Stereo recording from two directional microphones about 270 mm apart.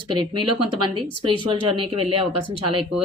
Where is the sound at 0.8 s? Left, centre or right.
Centre.